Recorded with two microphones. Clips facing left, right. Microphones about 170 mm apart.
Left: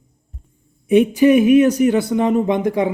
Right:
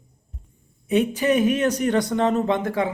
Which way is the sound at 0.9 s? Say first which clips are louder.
Left 8 dB; 15° left (ahead or behind).